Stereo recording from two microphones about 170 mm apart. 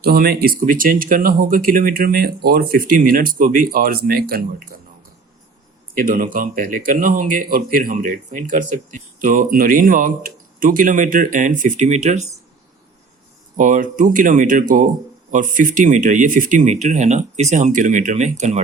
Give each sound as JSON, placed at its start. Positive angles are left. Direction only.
{"t": 0.0, "sound": "speech", "side_deg": -65}
{"t": 5.9, "sound": "speech", "side_deg": -55}
{"t": 13.6, "sound": "speech", "side_deg": -50}